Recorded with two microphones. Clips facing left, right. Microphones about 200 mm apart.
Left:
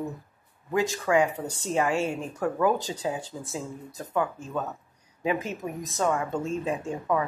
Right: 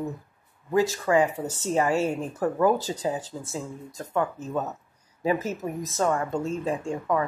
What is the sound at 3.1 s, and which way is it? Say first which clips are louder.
Speech: right 2 dB; 10° left (ahead or behind).